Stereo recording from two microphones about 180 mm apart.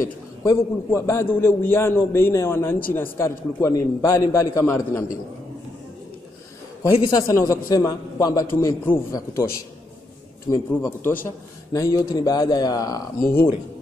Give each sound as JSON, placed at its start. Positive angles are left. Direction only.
{"t": 0.4, "sound": "a man's voice", "side_deg": 15}
{"t": 6.8, "sound": "a man's voice", "side_deg": 20}
{"t": 10.5, "sound": "a man's voice", "side_deg": 15}